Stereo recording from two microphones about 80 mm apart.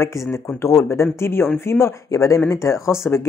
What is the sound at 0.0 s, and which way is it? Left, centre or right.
Speech, left.